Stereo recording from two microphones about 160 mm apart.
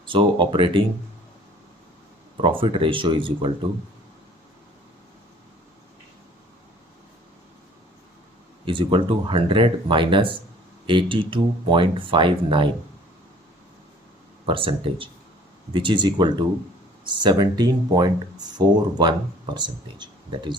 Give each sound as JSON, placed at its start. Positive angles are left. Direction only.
{"t": 0.0, "sound": "speech", "side_deg": -30}
{"t": 2.4, "sound": "speech", "side_deg": -30}
{"t": 8.6, "sound": "speech", "side_deg": -30}
{"t": 14.4, "sound": "speech", "side_deg": -35}